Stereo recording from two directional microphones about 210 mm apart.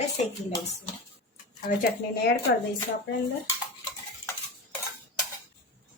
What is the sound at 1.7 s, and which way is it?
Speech, 40° left (ahead or behind).